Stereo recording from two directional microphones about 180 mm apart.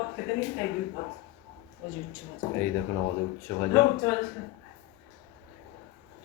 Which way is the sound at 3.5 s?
10° left (ahead or behind).